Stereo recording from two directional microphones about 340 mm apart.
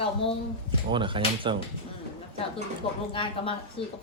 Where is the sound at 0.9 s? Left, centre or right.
Centre.